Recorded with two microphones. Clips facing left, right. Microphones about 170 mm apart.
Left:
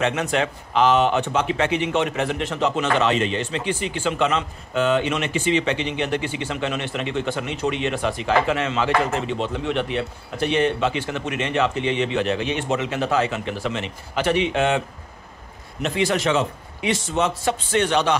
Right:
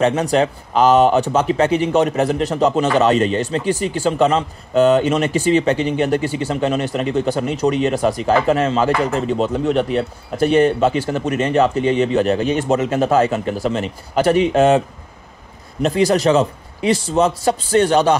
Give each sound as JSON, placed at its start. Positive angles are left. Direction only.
{"t": 0.0, "sound": "speech", "side_deg": -35}
{"t": 15.8, "sound": "speech", "side_deg": -40}